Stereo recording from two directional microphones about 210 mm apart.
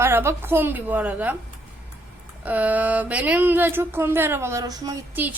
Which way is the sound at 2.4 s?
5° right (ahead or behind).